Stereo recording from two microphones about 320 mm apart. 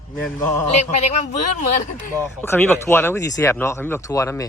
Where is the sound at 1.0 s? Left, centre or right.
Left.